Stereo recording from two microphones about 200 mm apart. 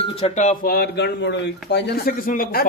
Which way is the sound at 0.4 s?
45° left (ahead or behind).